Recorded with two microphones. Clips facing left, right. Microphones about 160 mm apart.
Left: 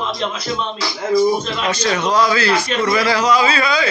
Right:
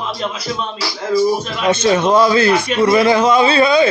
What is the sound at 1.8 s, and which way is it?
Speech, 25° right (ahead or behind).